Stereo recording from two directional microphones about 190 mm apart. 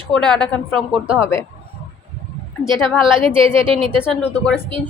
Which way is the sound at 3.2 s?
30° right (ahead or behind).